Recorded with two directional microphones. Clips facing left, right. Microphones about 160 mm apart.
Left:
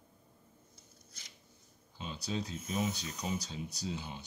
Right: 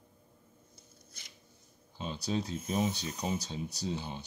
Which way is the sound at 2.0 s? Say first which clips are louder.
Right 4 dB; 35° right (ahead or behind).